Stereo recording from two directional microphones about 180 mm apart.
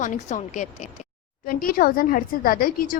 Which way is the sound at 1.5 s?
55° left (ahead or behind).